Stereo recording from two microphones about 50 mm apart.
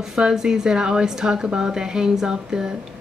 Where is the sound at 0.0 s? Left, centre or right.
Centre.